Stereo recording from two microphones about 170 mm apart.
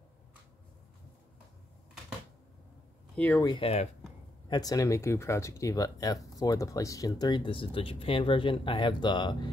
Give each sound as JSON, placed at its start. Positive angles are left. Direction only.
{"t": 3.2, "sound": "speech", "side_deg": 10}
{"t": 3.4, "sound": "speech", "side_deg": 30}
{"t": 4.5, "sound": "speech", "side_deg": 20}